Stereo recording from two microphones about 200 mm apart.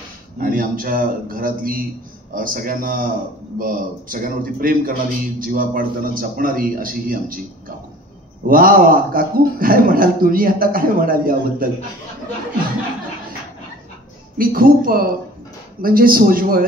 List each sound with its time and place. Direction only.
0.4 s a man's voice: 45° right (ahead or behind)
8.5 s a man's voice: 45° right (ahead or behind)
14.4 s a man's voice: 45° right (ahead or behind)